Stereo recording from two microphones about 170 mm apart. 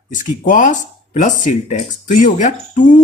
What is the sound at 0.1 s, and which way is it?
Speech, 50° left (ahead or behind).